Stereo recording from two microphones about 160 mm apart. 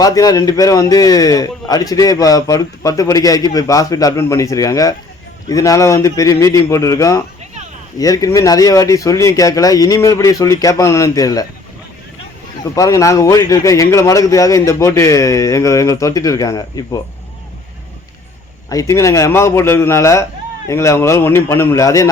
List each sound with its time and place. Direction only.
0.0 s a man's voice: 20° left (ahead or behind)
12.7 s a man's voice: 20° left (ahead or behind)
18.7 s a man's voice: 20° left (ahead or behind)